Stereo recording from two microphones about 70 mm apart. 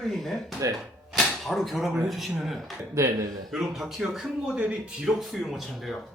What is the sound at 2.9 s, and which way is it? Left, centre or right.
Speech, right.